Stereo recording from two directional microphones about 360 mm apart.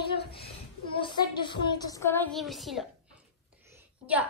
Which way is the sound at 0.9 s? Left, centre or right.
Centre.